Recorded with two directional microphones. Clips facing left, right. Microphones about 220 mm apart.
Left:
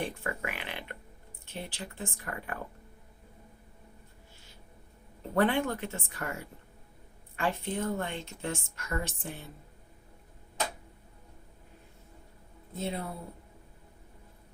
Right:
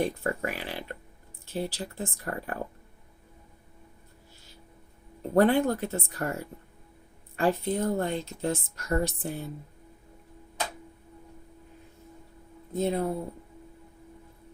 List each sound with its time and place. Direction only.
0.0 s a woman's voice: 40° right (ahead or behind)
5.3 s a woman's voice: 40° right (ahead or behind)
12.7 s speech: 45° right (ahead or behind)